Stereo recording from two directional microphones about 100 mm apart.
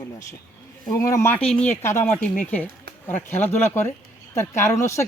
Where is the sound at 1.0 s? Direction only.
30° left (ahead or behind).